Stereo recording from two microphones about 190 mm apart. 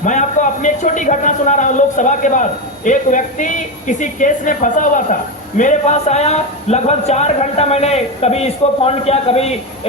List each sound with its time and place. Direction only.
0.0 s speech: 40° left (ahead or behind)